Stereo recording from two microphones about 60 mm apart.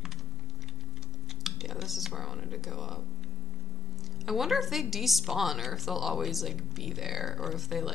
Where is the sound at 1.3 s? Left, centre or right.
Centre.